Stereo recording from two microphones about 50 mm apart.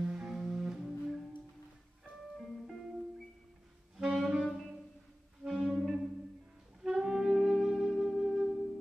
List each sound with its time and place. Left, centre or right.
0.1 s music: centre
2.3 s music: centre
3.9 s saxophone: centre
4.4 s music: centre
5.4 s clarinet: centre
6.8 s saxophone: centre